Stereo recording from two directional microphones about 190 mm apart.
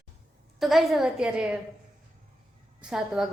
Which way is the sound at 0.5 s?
Centre (ahead or behind).